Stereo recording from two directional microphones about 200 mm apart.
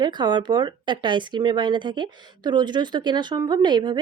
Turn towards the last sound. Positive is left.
turn(degrees=-20)  # may be behind; listen again after turning